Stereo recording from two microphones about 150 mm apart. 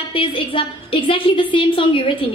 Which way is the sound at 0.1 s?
35° left (ahead or behind).